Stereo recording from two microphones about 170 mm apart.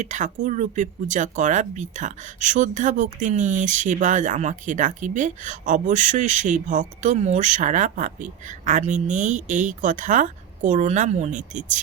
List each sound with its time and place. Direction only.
0.0 s speech: 45° right (ahead or behind)